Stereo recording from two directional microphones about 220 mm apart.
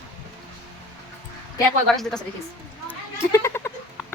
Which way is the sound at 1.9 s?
Centre (ahead or behind).